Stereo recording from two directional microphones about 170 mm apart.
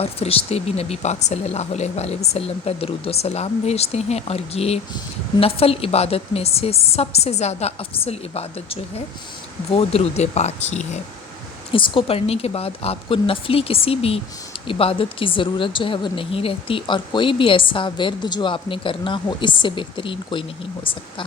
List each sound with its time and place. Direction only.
0.0 s speech: 35° left (ahead or behind)
11.7 s speech: 30° left (ahead or behind)